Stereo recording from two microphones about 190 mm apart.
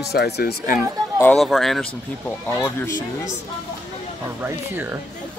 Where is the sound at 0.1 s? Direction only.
55° left (ahead or behind).